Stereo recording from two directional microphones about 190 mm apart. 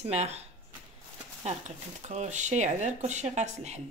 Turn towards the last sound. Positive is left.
turn(degrees=-35)  # may be behind; listen again after turning